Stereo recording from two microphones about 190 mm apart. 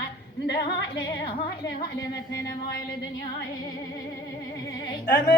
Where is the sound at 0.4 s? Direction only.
65° left (ahead or behind).